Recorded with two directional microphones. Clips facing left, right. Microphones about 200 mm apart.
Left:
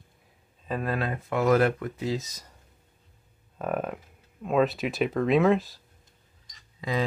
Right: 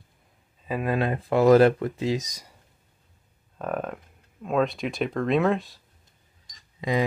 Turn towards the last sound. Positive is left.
turn(degrees=-20)  # may be behind; listen again after turning